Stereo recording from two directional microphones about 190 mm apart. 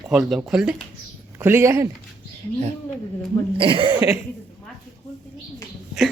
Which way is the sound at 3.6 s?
25° right (ahead or behind).